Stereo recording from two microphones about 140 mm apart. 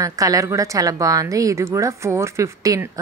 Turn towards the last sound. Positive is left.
turn(degrees=-25)  # may be behind; listen again after turning